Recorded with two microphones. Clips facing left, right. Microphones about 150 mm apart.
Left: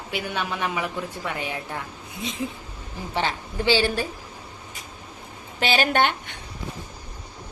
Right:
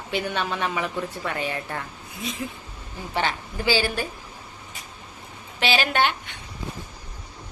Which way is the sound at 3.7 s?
30° left (ahead or behind).